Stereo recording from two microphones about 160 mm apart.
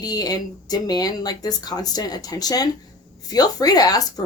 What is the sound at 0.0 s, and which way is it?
A woman's voice, 25° left (ahead or behind).